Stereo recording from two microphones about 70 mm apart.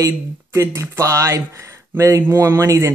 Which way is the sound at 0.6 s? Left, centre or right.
Right.